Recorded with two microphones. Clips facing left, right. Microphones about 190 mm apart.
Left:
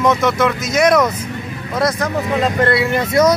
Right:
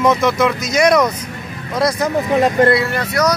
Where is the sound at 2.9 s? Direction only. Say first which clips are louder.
Left 4 dB; 25° left (ahead or behind).